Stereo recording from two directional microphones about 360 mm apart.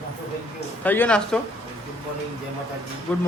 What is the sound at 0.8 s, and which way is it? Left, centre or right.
Speech, centre.